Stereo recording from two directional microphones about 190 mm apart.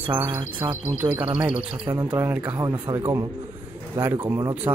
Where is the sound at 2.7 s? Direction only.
20° right (ahead or behind).